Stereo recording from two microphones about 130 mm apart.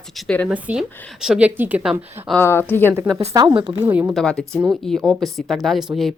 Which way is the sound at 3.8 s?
15° right (ahead or behind).